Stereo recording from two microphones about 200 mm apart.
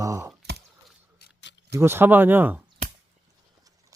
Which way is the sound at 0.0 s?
15° right (ahead or behind).